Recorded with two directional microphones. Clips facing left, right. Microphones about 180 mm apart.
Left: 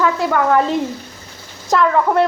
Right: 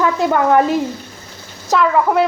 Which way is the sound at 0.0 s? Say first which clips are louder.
Right 1 dB; 20° right (ahead or behind).